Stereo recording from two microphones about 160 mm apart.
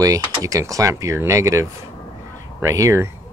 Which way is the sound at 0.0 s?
20° right (ahead or behind).